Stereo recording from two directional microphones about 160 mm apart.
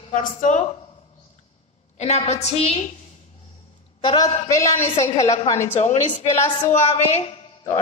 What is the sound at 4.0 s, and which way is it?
Speech, 30° left (ahead or behind).